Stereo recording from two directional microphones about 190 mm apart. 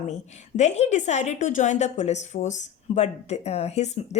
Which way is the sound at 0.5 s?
35° left (ahead or behind).